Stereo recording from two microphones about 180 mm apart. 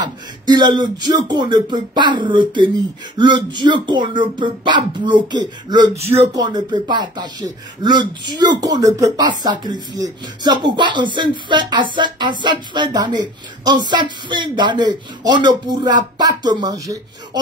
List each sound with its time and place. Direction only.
0.0 s speech: 25° right (ahead or behind)